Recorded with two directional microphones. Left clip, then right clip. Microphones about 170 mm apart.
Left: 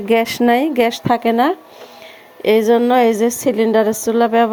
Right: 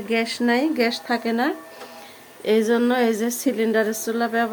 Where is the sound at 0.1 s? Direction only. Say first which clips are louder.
Left 8 dB; 40° left (ahead or behind).